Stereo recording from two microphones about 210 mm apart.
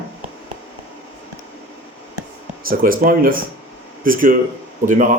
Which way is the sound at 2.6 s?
45° right (ahead or behind).